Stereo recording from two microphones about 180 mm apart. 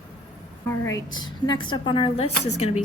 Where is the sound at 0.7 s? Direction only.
15° left (ahead or behind); by 2.8 s 35° left (ahead or behind).